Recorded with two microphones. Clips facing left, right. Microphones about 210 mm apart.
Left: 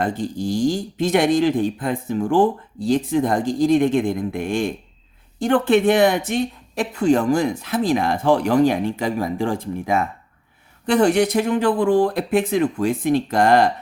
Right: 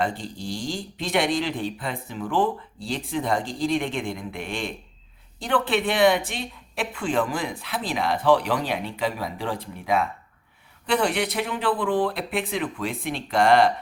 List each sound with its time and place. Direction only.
0.0 s speech: 45° left (ahead or behind)